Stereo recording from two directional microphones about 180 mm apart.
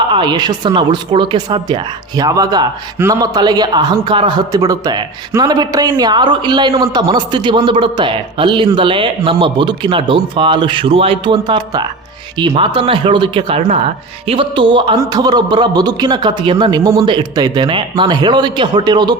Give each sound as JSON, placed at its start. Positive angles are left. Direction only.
{"t": 0.1, "sound": "a man's voice", "side_deg": -25}